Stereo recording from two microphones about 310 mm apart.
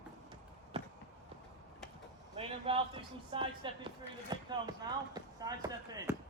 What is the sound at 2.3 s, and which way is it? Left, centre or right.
A man's voice, centre.